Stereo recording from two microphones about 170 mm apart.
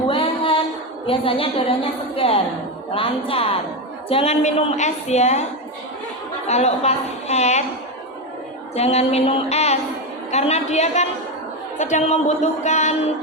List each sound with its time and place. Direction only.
0.1 s music: 30° left (ahead or behind)
1.0 s a woman's voice: 35° left (ahead or behind)
6.5 s a woman's voice: 40° left (ahead or behind)
8.7 s a woman's voice: 40° left (ahead or behind)